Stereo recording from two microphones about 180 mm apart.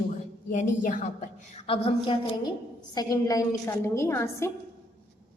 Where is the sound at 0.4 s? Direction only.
50° left (ahead or behind).